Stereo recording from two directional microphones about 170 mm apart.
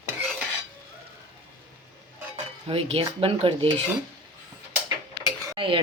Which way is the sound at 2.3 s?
35° right (ahead or behind).